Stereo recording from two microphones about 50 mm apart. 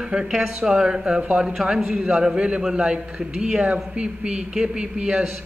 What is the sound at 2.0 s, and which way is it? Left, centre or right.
A man's voice, centre.